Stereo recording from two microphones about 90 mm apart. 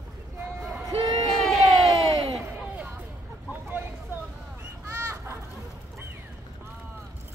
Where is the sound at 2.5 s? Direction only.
15° right (ahead or behind).